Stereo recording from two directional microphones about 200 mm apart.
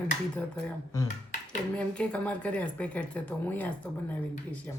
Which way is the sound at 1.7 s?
5° left (ahead or behind).